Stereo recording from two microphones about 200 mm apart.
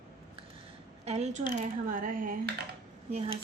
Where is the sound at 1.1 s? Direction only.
35° right (ahead or behind).